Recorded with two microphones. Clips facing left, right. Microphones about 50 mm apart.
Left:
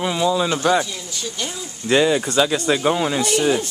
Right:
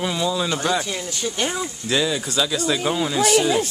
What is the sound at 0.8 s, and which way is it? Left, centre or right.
Speech, right.